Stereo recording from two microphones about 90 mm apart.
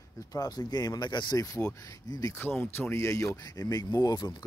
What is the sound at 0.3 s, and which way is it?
Speech, 45° left (ahead or behind).